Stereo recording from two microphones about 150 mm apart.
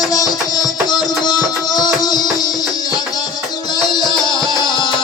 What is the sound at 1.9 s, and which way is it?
Music, 25° left (ahead or behind).